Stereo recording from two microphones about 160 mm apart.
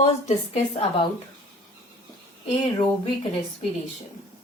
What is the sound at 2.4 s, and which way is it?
Speech, 35° left (ahead or behind).